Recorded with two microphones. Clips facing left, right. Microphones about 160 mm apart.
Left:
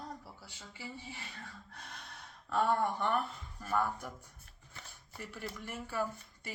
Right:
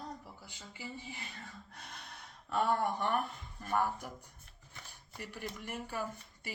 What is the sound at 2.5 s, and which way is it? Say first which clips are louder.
Speech: left 1 dB; 15° right (ahead or behind).